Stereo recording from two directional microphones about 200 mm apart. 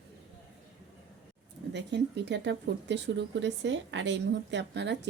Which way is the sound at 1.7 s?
60° right (ahead or behind).